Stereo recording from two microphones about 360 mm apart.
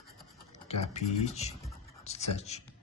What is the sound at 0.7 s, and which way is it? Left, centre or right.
Speech, centre.